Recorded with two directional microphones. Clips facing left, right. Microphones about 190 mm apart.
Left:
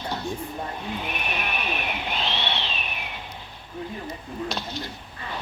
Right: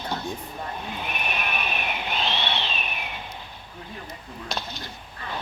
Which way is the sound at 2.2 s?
50° right (ahead or behind).